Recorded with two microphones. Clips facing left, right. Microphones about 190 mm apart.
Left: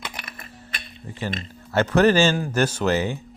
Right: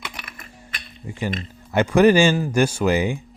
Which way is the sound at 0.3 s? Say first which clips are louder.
Left 1 dB; 35° left (ahead or behind).